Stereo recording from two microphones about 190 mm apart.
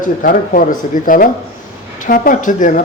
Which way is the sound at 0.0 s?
45° left (ahead or behind).